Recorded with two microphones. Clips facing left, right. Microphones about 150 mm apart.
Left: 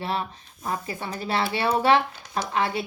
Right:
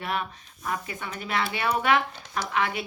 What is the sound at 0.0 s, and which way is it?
Speech, 30° left (ahead or behind).